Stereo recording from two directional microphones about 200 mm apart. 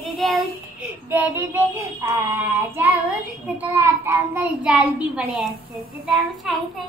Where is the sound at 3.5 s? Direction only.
10° right (ahead or behind).